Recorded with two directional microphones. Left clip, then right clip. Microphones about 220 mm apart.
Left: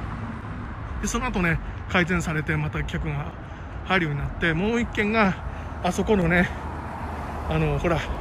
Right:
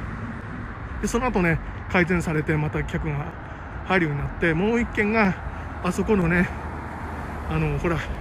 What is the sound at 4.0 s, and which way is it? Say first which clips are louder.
Speech: right 2 dB; 35° left (ahead or behind).